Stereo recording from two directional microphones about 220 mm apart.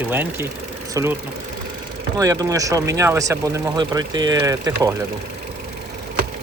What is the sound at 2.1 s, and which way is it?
Speech, 15° right (ahead or behind).